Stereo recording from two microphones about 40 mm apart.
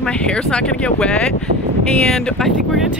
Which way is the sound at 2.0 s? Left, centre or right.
Centre.